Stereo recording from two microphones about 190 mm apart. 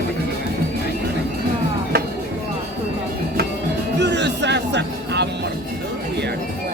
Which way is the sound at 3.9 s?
65° right (ahead or behind).